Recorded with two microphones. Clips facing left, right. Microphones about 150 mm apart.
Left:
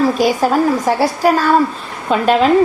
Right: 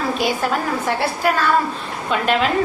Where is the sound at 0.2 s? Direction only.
40° left (ahead or behind).